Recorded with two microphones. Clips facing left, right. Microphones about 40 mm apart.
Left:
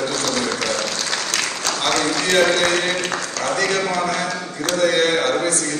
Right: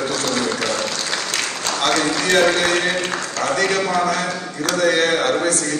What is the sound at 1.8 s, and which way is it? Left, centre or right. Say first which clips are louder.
A man's voice: right 2 dB; right.